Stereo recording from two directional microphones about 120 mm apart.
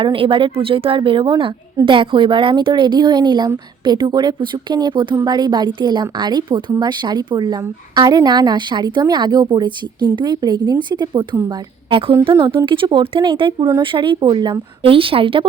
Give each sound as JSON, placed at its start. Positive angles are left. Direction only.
{"t": 0.0, "sound": "a woman's voice", "side_deg": -45}